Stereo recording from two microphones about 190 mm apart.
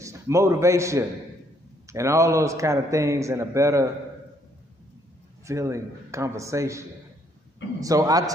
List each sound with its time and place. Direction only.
0.0 s a man's voice: 15° right (ahead or behind)
5.5 s a man's voice: 15° right (ahead or behind)
7.8 s a man's voice: 20° right (ahead or behind)